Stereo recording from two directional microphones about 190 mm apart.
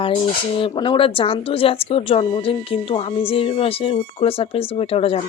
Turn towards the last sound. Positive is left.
turn(degrees=30)  # may be behind; listen again after turning